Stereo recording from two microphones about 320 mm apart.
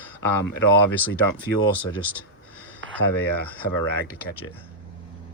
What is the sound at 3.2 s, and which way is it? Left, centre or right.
Speech, centre.